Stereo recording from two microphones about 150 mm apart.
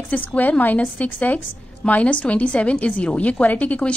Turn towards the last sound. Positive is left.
turn(degrees=10)  # may be behind; listen again after turning